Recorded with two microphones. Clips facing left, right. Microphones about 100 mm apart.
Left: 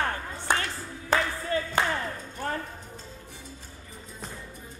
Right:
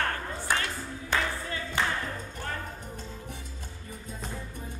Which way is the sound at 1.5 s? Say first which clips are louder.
Left 8 dB; 35° left (ahead or behind).